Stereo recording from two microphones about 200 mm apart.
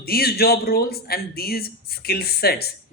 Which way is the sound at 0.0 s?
50° left (ahead or behind).